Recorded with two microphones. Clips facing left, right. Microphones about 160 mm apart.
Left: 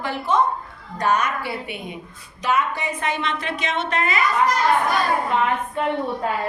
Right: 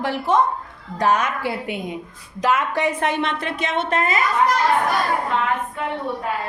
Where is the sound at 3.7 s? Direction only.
50° right (ahead or behind).